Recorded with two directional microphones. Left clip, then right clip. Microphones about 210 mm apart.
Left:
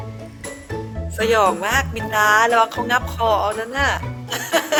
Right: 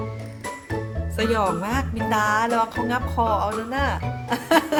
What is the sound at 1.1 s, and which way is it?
Speech, 10° left (ahead or behind).